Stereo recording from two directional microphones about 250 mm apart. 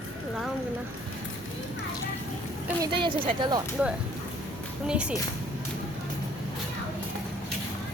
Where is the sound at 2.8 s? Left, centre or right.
Centre.